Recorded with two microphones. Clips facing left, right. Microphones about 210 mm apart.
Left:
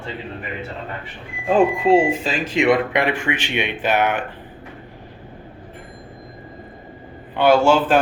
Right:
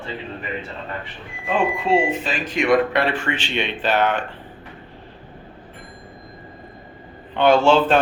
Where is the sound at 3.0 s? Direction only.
10° left (ahead or behind).